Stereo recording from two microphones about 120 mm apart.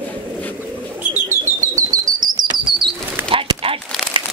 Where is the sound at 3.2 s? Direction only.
45° right (ahead or behind).